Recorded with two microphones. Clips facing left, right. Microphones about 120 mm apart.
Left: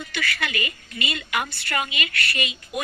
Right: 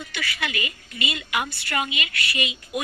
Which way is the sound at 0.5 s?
50° left (ahead or behind).